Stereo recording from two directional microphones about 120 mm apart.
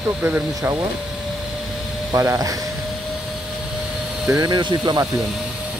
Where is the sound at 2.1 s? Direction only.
30° right (ahead or behind).